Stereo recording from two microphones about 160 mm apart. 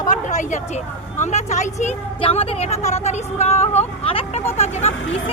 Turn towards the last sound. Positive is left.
turn(degrees=45)  # may be behind; listen again after turning